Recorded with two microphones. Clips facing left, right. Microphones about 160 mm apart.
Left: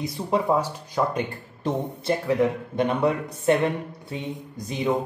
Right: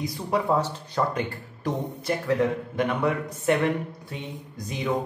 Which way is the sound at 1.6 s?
25° left (ahead or behind).